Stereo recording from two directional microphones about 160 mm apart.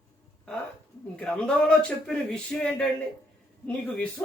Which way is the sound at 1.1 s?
5° left (ahead or behind).